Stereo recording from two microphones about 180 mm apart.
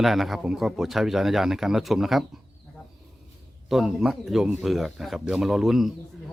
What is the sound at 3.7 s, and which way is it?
Speech, centre (ahead or behind).